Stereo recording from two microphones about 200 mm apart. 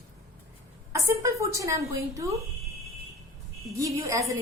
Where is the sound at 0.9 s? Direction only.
15° right (ahead or behind).